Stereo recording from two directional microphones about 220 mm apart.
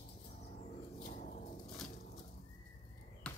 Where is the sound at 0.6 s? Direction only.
35° left (ahead or behind).